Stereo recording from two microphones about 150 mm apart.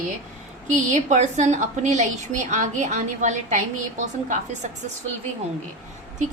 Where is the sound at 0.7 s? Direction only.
55° right (ahead or behind).